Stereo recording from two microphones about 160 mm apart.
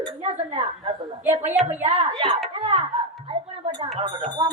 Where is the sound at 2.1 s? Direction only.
30° right (ahead or behind).